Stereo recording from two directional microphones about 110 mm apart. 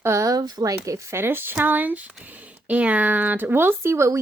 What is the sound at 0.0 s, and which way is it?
Speech, 25° right (ahead or behind).